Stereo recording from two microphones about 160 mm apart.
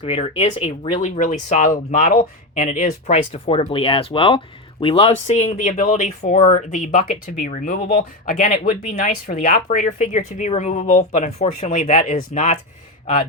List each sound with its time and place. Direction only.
0.0 s speech: 40° left (ahead or behind)